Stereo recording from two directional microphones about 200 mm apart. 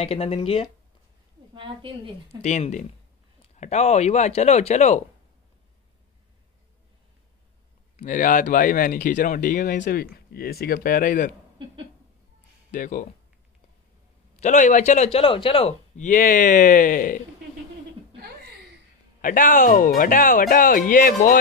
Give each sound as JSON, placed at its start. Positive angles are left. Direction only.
{"t": 0.0, "sound": "speech", "side_deg": 30}
{"t": 1.5, "sound": "a woman's voice", "side_deg": -25}
{"t": 2.4, "sound": "speech", "side_deg": 35}
{"t": 8.0, "sound": "speech", "side_deg": 40}
{"t": 12.7, "sound": "speech", "side_deg": 40}
{"t": 14.3, "sound": "a man's voice", "side_deg": 35}
{"t": 19.2, "sound": "speech", "side_deg": 40}